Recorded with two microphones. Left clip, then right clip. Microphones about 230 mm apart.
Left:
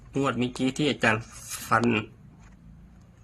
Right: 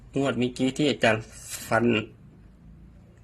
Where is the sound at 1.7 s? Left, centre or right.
Centre.